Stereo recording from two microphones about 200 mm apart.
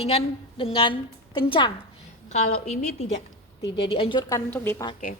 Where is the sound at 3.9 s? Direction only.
25° left (ahead or behind).